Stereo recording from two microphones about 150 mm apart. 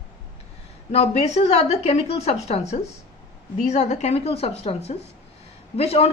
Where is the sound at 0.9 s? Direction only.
45° left (ahead or behind).